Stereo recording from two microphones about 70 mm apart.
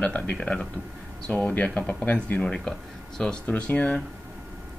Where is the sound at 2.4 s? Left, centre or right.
Centre.